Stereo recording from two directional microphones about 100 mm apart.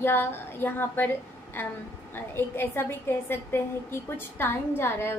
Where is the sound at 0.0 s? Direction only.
25° left (ahead or behind).